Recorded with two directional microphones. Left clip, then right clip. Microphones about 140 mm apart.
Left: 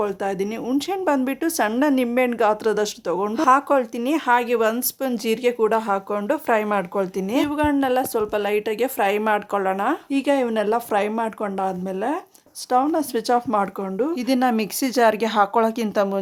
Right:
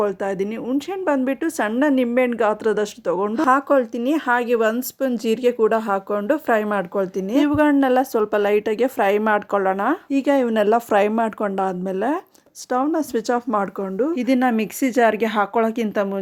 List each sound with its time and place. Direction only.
0.0 s speech: 30° right (ahead or behind)
7.3 s speech: 45° right (ahead or behind)
12.7 s speech: 25° right (ahead or behind)